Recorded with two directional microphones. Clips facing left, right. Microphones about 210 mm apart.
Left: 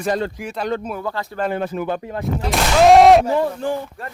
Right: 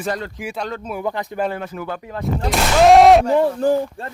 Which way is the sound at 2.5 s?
Centre (ahead or behind).